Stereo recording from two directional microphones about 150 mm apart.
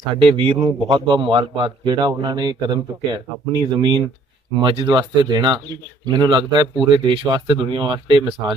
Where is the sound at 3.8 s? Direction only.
30° right (ahead or behind).